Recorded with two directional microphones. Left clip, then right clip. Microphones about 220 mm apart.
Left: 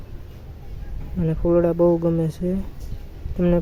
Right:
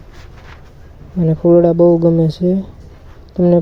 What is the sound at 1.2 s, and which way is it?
Speech, 5° right (ahead or behind).